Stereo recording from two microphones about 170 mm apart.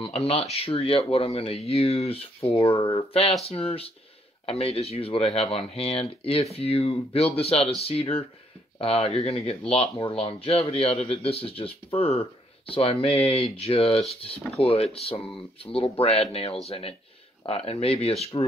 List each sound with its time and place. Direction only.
0.0 s speech: 35° left (ahead or behind)